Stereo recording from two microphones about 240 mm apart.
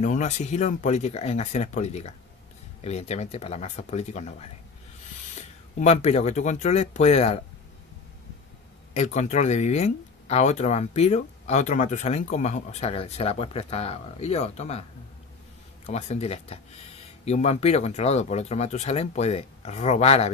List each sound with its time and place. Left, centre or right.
0.0 s speech: left
5.8 s speech: left
8.9 s speech: left
15.9 s speech: left